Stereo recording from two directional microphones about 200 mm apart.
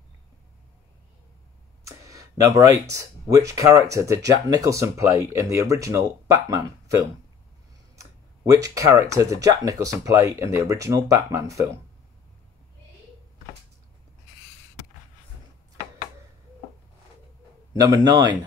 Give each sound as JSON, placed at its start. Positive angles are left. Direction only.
{"t": 1.9, "sound": "speech", "side_deg": -15}
{"t": 17.7, "sound": "a man's voice", "side_deg": -20}